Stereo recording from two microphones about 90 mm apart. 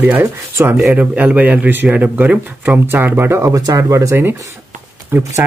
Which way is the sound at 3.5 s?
40° right (ahead or behind).